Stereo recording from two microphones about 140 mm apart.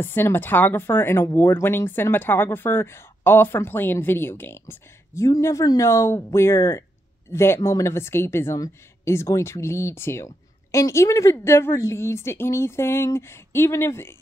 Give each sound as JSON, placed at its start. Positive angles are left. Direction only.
{"t": 0.0, "sound": "speech", "side_deg": 15}